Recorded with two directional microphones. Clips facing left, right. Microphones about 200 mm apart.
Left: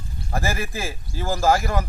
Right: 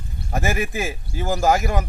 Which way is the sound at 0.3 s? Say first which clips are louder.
Right 3 dB; 20° right (ahead or behind).